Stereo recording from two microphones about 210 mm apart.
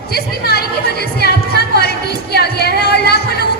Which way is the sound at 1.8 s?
50° left (ahead or behind).